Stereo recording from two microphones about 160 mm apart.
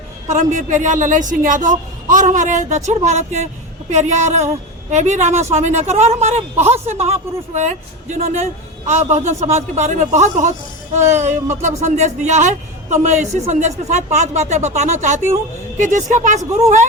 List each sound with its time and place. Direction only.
0.3 s a woman's voice: 50° right (ahead or behind)